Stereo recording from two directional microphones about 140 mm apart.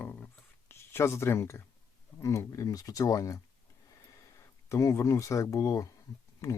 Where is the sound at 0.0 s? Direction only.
15° left (ahead or behind).